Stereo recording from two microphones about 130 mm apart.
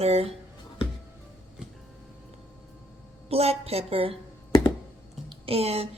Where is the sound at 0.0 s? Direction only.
50° right (ahead or behind).